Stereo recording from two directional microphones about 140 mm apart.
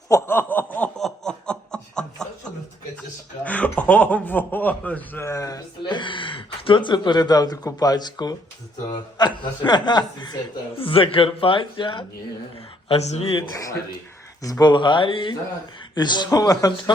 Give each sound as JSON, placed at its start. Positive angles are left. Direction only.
{"t": 0.1, "sound": "snicker", "side_deg": 20}
{"t": 3.4, "sound": "a man's voice", "side_deg": 10}
{"t": 14.4, "sound": "a man's voice", "side_deg": 30}